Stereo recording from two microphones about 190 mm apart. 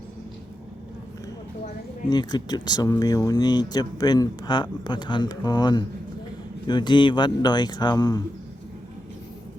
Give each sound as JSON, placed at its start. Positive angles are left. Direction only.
{"t": 2.0, "sound": "speech", "side_deg": 20}